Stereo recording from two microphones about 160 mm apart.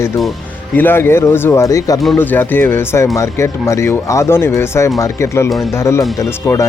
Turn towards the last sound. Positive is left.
turn(degrees=20)  # may be behind; listen again after turning